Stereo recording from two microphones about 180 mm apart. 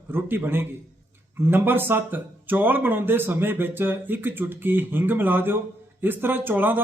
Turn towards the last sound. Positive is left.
turn(degrees=-10)  # may be behind; listen again after turning